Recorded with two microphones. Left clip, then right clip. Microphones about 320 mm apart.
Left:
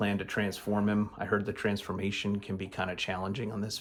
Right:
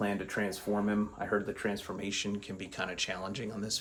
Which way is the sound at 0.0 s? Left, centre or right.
Left.